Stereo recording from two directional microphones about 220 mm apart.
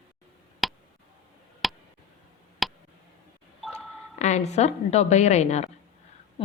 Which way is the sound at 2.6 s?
Centre (ahead or behind).